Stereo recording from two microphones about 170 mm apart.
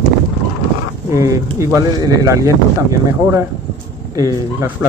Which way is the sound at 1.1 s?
15° right (ahead or behind).